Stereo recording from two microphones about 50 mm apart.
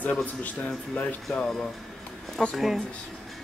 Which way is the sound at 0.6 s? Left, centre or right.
Left.